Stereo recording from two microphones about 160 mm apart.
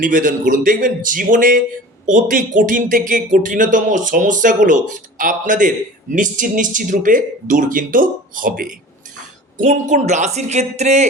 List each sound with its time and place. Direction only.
0.0 s a man's voice: 55° right (ahead or behind)